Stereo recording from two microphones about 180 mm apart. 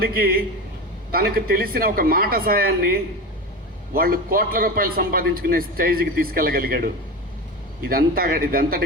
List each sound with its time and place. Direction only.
0.0 s a man's voice: 55° right (ahead or behind)